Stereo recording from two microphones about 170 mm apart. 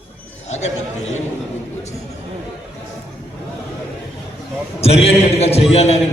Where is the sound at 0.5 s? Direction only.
40° left (ahead or behind).